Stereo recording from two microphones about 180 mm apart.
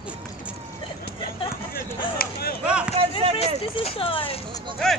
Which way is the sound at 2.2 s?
55° left (ahead or behind).